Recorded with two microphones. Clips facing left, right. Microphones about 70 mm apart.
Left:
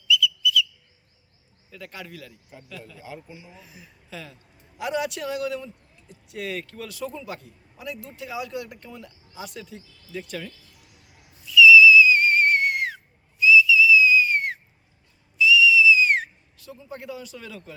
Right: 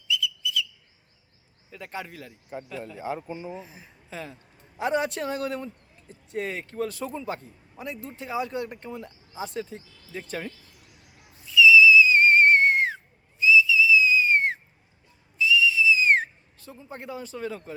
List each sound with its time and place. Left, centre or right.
0.1 s whistle: right
1.7 s speech: right
3.0 s speech: right
3.5 s speech: right
11.4 s whistle: right